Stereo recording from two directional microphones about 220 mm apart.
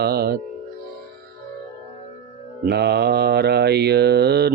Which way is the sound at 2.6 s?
50° right (ahead or behind).